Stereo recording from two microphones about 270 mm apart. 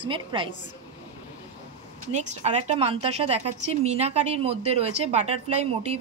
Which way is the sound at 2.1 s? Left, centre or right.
Right.